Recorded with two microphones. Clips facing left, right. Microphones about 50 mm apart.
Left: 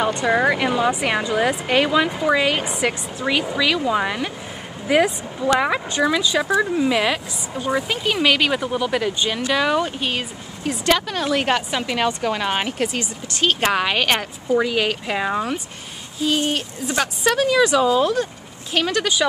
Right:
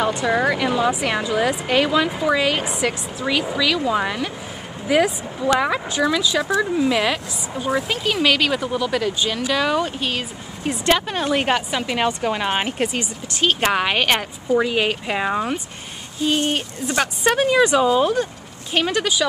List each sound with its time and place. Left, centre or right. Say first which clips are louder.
0.3 s speech: left 3 dB; centre
10.6 s speech: even; centre
14.1 s speech: even; centre
14.7 s speech: even; centre
16.3 s speech: even; right; by 19.1 s centre